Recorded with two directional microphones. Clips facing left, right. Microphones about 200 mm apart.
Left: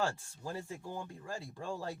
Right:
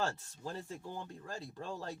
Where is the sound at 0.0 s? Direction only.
10° left (ahead or behind).